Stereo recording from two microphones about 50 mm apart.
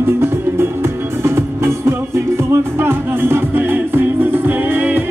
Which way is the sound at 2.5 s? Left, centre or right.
Right.